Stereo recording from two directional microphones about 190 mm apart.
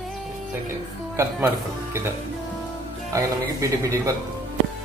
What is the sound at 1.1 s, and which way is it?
Speech, 10° right (ahead or behind).